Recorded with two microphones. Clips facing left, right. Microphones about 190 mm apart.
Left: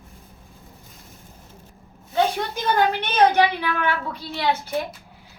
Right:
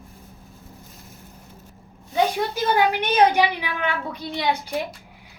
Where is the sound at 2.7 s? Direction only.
10° right (ahead or behind).